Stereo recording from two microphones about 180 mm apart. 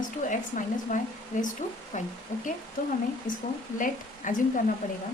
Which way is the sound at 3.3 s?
90° left.